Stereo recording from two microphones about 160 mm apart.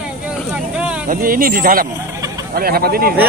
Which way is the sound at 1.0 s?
60° right (ahead or behind).